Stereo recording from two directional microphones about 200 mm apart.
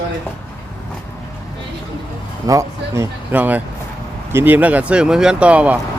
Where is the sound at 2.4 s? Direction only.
15° right (ahead or behind).